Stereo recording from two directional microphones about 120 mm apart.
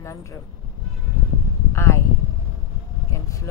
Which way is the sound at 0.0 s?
25° left (ahead or behind).